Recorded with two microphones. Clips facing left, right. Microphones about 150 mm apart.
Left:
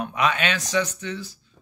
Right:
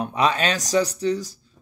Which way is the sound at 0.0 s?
30° right (ahead or behind).